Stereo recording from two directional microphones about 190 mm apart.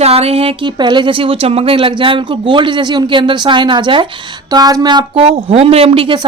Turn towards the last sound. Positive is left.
turn(degrees=-30)  # may be behind; listen again after turning